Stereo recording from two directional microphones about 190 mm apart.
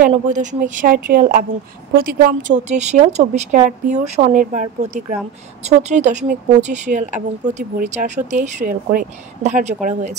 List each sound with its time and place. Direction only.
0.1 s a woman's voice: 40° right (ahead or behind)